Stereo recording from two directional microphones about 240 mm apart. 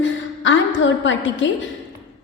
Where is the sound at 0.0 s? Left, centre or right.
Left.